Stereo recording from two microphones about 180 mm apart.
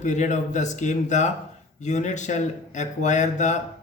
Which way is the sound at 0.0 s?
40° left (ahead or behind).